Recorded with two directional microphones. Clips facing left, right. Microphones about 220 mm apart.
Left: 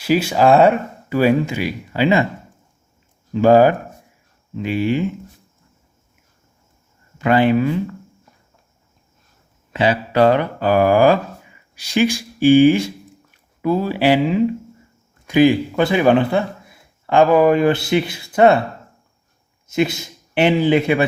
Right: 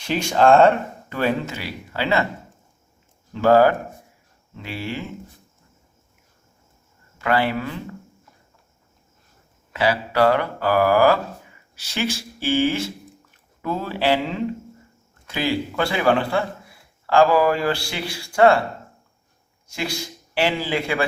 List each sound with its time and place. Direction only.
0.0 s speech: 5° left (ahead or behind)
3.3 s speech: 15° left (ahead or behind)
7.2 s speech: 20° left (ahead or behind)
9.7 s speech: 20° left (ahead or behind)
19.6 s speech: 20° left (ahead or behind)